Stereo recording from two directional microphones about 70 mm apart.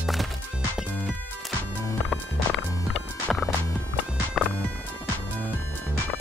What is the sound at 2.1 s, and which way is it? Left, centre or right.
Music, centre.